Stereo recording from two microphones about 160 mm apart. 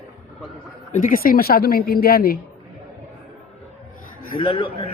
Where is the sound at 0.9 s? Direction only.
60° left (ahead or behind).